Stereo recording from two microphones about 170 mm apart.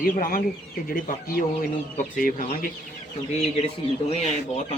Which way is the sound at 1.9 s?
50° left (ahead or behind).